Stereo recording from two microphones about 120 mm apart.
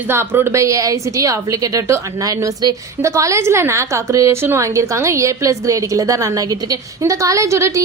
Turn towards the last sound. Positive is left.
turn(degrees=-25)  # may be behind; listen again after turning